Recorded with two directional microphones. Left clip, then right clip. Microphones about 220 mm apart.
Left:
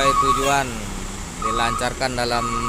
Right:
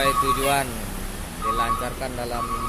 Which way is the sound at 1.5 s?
20° left (ahead or behind).